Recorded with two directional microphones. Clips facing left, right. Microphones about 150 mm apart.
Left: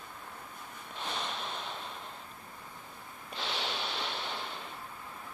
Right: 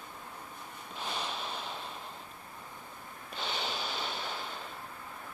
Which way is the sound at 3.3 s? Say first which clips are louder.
Even; centre (ahead or behind).